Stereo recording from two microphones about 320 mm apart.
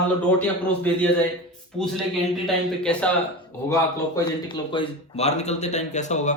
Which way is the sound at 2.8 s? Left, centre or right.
Centre.